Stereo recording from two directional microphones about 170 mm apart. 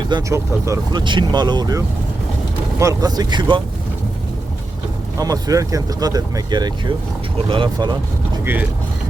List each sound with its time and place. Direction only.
0.1 s speech: 20° right (ahead or behind)
5.1 s speech: 20° right (ahead or behind)
8.4 s speech: 10° right (ahead or behind)